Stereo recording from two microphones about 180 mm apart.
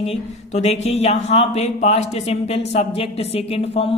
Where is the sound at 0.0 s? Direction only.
35° left (ahead or behind).